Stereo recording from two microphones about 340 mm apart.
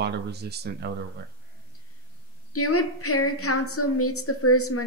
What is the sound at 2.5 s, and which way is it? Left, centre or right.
A woman's voice, left.